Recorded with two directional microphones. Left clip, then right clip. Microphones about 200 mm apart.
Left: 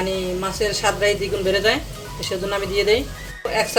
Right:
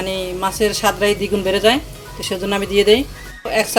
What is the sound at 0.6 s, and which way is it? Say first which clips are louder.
Speech: right 3 dB; 40° right (ahead or behind).